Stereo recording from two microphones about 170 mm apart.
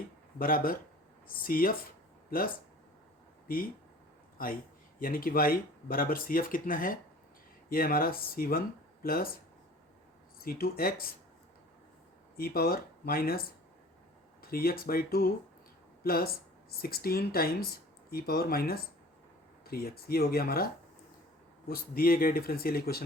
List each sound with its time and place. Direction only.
0.3 s speech: 55° left (ahead or behind)
4.4 s speech: 55° left (ahead or behind)
10.4 s speech: 60° left (ahead or behind)
12.4 s speech: 65° left (ahead or behind)
14.4 s speech: 60° left (ahead or behind)
21.7 s speech: 60° left (ahead or behind)